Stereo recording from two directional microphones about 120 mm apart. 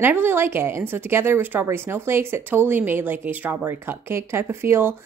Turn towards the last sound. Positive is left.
turn(degrees=-20)  # may be behind; listen again after turning